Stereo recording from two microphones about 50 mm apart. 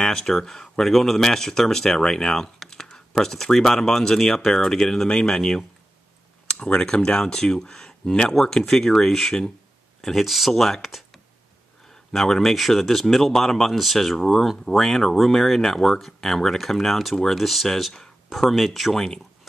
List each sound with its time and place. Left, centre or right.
0.0 s a sound: centre
0.3 s speech: centre
6.6 s speech: centre
12.1 s speech: centre